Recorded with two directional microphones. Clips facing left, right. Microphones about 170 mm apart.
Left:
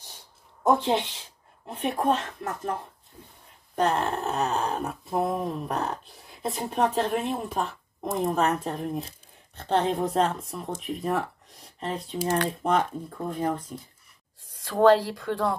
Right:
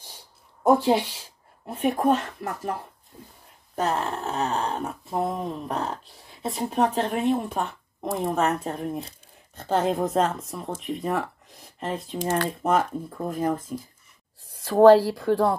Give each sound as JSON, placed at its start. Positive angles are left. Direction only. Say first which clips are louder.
{"t": 0.7, "sound": "speech", "louder": "right 3 dB", "side_deg": -10}
{"t": 3.7, "sound": "speech", "louder": "left 1 dB", "side_deg": 0}
{"t": 14.6, "sound": "speech", "louder": "right 5 dB", "side_deg": -40}